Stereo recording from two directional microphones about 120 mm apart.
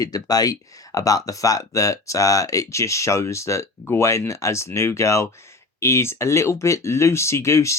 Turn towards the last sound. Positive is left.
turn(degrees=25)  # may be behind; listen again after turning